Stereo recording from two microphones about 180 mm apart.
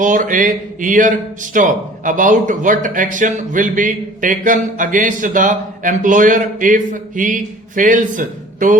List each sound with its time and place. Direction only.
0.0 s speech: 45° right (ahead or behind)